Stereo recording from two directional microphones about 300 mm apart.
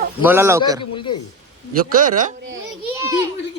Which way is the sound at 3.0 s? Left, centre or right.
Centre.